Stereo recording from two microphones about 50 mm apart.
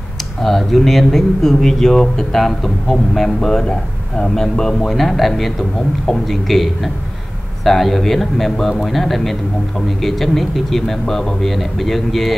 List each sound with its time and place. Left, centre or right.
0.4 s a man's voice: centre